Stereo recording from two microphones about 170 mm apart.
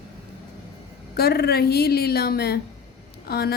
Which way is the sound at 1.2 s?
70° left (ahead or behind).